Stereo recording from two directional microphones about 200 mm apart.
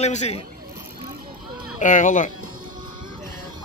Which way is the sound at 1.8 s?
40° left (ahead or behind).